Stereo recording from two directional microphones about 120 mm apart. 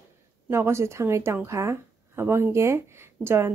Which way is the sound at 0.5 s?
20° right (ahead or behind).